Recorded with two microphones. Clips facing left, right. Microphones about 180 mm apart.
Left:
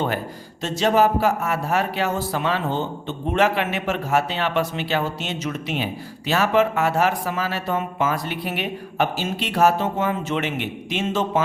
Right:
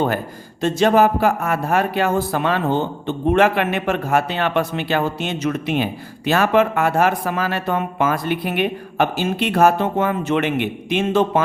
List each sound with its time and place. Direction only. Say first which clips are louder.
0.6 s speech: right 4 dB; 55° right (ahead or behind)